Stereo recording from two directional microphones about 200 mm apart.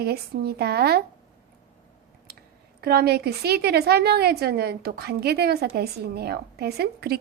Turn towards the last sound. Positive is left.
turn(degrees=-55)  # may be behind; listen again after turning